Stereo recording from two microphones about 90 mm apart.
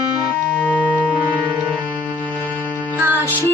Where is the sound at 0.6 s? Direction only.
20° left (ahead or behind).